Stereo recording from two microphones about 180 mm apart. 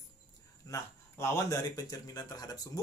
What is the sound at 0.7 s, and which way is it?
Speech, 15° left (ahead or behind).